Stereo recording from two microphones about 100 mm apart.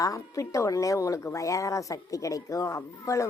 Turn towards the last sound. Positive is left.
turn(degrees=30)  # may be behind; listen again after turning